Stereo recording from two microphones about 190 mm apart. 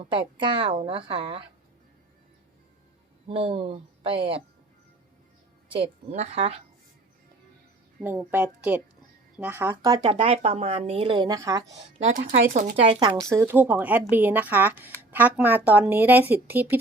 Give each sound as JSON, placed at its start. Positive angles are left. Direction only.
{"t": 0.0, "sound": "a woman's voice", "side_deg": -25}
{"t": 3.2, "sound": "speech", "side_deg": -30}
{"t": 6.1, "sound": "a woman's voice", "side_deg": -35}
{"t": 8.0, "sound": "speech", "side_deg": -10}
{"t": 10.1, "sound": "a woman's voice", "side_deg": -30}
{"t": 11.9, "sound": "speech", "side_deg": -35}